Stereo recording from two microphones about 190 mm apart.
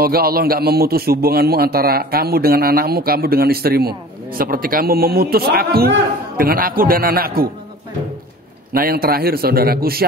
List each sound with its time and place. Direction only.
0.0 s a man's voice: 50° right (ahead or behind)
8.7 s a man's voice: 50° right (ahead or behind)